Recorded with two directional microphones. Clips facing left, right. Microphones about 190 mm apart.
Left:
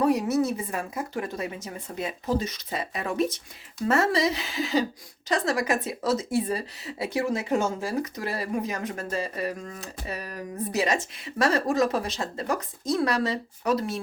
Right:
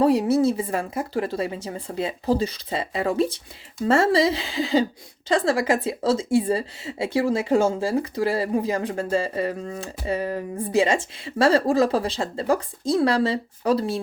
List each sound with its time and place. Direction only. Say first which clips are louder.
0.0 s speech: right 5 dB; 30° right (ahead or behind)